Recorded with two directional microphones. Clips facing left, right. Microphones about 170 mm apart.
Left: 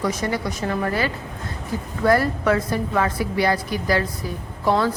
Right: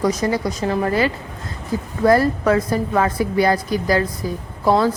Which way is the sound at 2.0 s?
35° right (ahead or behind).